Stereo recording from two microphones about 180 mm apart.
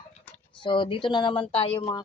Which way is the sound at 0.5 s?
25° left (ahead or behind).